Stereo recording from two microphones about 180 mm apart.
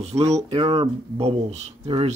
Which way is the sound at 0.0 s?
35° right (ahead or behind).